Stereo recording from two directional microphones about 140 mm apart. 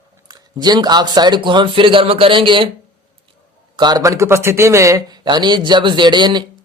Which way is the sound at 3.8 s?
30° right (ahead or behind).